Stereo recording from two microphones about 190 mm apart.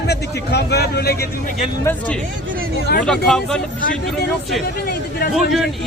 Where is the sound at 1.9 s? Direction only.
5° left (ahead or behind).